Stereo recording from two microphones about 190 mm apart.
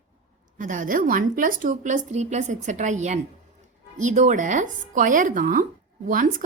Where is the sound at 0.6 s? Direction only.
45° right (ahead or behind).